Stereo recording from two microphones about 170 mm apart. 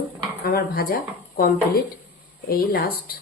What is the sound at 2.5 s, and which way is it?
Speech, 60° left (ahead or behind).